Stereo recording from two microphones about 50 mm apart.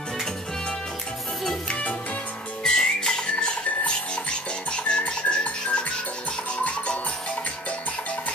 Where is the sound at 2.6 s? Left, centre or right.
Centre.